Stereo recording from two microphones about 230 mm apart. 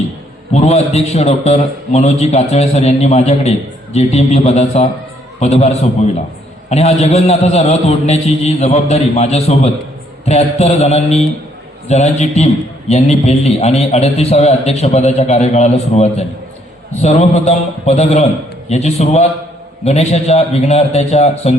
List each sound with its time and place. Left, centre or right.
0.5 s a man's voice: left